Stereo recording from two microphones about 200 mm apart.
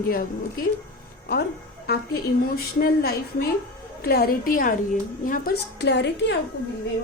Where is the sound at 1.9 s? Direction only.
50° left (ahead or behind).